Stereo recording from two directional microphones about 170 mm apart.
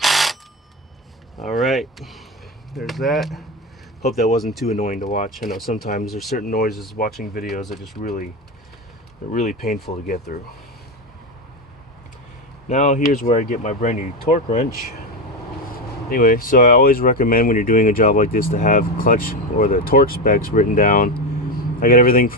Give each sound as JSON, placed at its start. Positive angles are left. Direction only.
{"t": 0.0, "sound": "a sound", "side_deg": 0}
{"t": 1.4, "sound": "speech", "side_deg": 0}
{"t": 4.8, "sound": "speech", "side_deg": 55}
{"t": 6.1, "sound": "speech", "side_deg": 0}
{"t": 6.3, "sound": "speech", "side_deg": 65}
{"t": 9.3, "sound": "speech", "side_deg": 45}
{"t": 9.6, "sound": "speech", "side_deg": 65}
{"t": 12.6, "sound": "speech", "side_deg": 45}
{"t": 16.0, "sound": "speech", "side_deg": 60}